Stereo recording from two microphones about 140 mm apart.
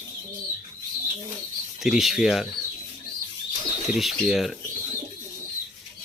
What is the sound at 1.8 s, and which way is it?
Speech, 5° right (ahead or behind).